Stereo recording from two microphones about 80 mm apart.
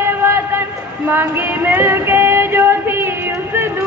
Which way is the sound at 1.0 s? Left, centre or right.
Right.